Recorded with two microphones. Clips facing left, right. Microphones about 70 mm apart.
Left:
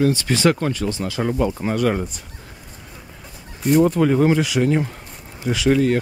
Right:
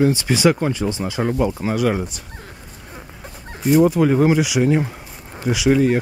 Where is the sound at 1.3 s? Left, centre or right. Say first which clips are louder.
Right 1 dB; centre.